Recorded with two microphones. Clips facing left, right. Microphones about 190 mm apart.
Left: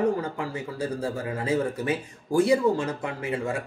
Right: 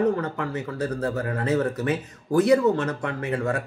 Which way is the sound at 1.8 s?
30° left (ahead or behind).